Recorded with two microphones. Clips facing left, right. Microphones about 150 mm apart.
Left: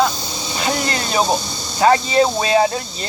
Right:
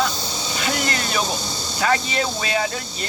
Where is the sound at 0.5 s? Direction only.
30° left (ahead or behind).